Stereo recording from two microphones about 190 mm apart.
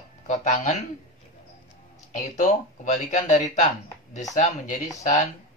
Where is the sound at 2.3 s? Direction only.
40° left (ahead or behind).